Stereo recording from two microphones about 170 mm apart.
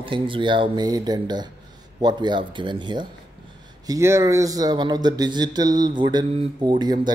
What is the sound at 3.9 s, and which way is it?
Speech, 15° right (ahead or behind).